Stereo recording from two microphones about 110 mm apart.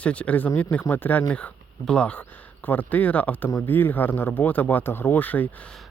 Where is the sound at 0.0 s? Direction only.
10° left (ahead or behind).